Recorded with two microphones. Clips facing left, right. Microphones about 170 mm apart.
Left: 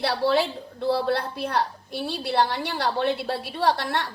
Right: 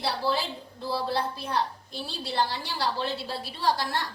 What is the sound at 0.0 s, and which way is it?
A woman's voice, 65° left (ahead or behind).